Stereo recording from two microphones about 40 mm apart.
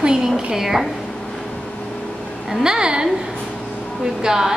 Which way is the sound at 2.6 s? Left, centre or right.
Centre.